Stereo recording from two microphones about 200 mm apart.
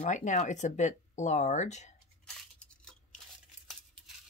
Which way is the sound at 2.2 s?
5° left (ahead or behind).